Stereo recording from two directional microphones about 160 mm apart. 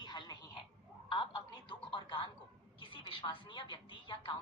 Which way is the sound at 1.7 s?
30° left (ahead or behind).